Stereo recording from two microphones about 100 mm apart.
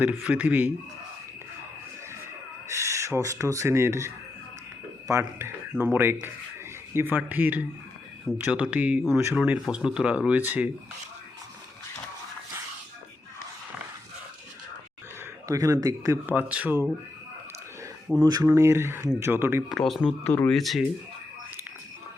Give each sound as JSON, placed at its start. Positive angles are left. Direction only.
{"t": 0.0, "sound": "speech", "side_deg": -15}
{"t": 2.6, "sound": "speech", "side_deg": -30}
{"t": 15.4, "sound": "speech", "side_deg": -35}
{"t": 16.2, "sound": "speech", "side_deg": -15}
{"t": 18.2, "sound": "speech", "side_deg": -45}
{"t": 18.4, "sound": "speech", "side_deg": -30}
{"t": 19.6, "sound": "speech", "side_deg": 0}
{"t": 20.2, "sound": "speech", "side_deg": 20}
{"t": 20.5, "sound": "speech", "side_deg": 0}